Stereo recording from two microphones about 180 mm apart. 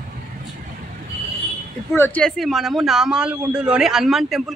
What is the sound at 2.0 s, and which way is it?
Speech, 10° left (ahead or behind).